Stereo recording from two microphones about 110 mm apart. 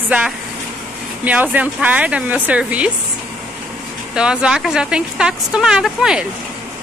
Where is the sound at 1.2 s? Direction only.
15° right (ahead or behind).